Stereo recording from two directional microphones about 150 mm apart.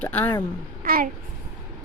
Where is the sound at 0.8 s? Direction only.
75° right (ahead or behind).